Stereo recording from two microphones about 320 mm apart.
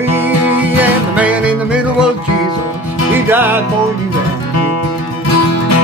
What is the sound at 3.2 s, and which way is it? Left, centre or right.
Music, centre.